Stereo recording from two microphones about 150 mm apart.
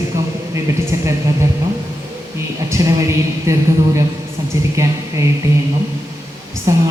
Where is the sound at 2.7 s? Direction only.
20° right (ahead or behind).